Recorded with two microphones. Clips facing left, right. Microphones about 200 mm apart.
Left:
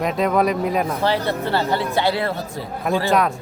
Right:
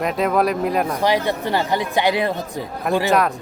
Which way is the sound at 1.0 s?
15° right (ahead or behind).